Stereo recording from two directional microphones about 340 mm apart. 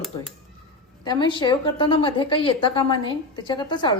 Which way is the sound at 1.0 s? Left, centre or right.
Centre.